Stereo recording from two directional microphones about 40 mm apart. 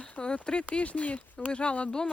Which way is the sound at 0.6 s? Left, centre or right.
Left.